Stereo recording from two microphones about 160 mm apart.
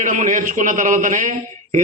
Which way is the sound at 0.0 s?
55° right (ahead or behind).